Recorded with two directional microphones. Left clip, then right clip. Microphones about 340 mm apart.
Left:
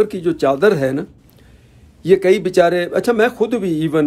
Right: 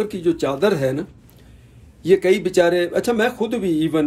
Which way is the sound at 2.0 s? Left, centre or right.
Centre.